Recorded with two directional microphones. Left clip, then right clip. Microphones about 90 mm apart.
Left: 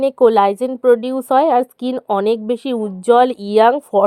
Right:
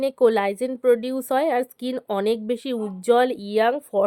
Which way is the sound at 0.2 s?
35° left (ahead or behind).